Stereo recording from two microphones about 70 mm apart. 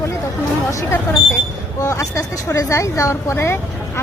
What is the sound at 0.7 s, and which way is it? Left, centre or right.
A woman's voice, left.